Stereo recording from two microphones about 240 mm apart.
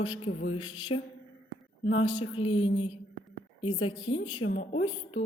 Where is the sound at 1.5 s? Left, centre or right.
Left.